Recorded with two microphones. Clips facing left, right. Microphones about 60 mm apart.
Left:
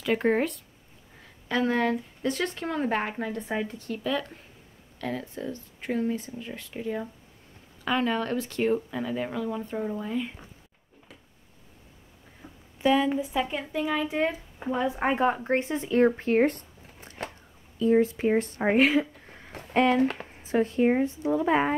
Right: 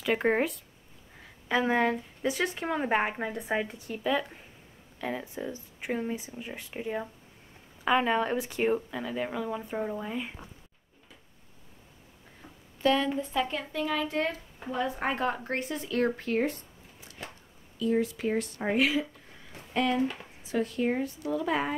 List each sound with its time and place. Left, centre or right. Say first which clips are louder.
0.0 s speech: left 2 dB; centre
8.9 s speech: left 2 dB; centre
12.8 s speech: left 3 dB; centre; by 16.4 s left
16.4 s zipper: left 5 dB; left
17.7 s speech: left 6 dB; left
20.0 s speech: left 5 dB; left
20.4 s speech: left 5 dB; left